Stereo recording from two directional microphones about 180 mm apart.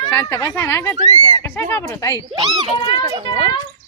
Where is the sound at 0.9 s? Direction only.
20° right (ahead or behind).